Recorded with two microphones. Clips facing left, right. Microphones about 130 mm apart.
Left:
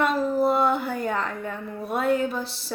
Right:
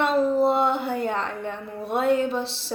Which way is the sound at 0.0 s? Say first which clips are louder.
Right 2 dB; 25° right (ahead or behind).